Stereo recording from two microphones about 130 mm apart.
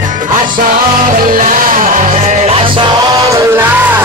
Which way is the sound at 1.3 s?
80° right.